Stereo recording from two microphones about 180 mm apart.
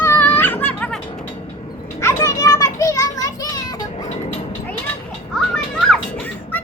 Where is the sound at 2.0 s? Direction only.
15° left (ahead or behind).